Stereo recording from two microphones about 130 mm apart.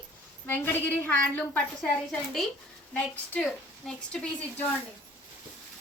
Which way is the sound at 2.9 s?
5° left (ahead or behind).